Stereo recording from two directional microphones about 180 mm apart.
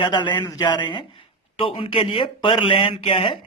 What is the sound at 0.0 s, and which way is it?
A man's voice, 25° left (ahead or behind).